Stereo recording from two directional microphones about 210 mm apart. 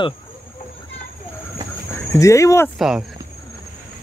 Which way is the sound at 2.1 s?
15° left (ahead or behind).